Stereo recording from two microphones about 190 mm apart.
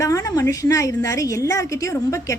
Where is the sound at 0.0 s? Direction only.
15° left (ahead or behind).